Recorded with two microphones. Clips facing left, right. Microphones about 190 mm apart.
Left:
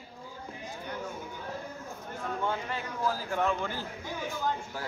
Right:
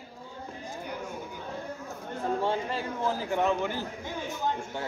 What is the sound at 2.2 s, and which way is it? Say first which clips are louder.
A man's voice: right 5 dB; 30° right (ahead or behind).